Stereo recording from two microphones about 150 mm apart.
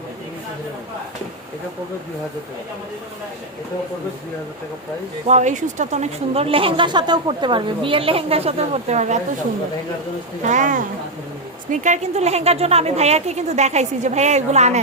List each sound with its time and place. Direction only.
5.3 s a woman's voice: 50° right (ahead or behind)
10.4 s a woman's voice: 55° right (ahead or behind)